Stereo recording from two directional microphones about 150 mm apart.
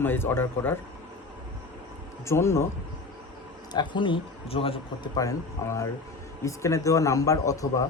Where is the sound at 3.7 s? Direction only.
30° left (ahead or behind).